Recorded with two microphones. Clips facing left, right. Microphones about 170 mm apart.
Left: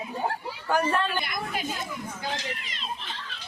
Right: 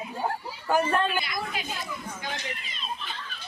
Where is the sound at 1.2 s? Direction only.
50° left (ahead or behind).